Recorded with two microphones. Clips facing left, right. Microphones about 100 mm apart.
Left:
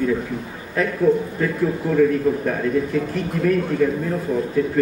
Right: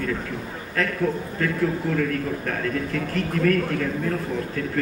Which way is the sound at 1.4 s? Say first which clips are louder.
Left 2 dB; 15° left (ahead or behind).